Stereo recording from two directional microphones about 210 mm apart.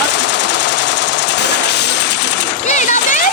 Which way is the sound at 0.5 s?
55° left (ahead or behind).